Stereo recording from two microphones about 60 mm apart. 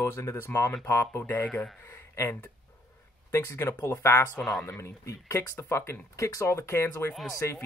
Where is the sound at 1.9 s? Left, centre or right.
Left.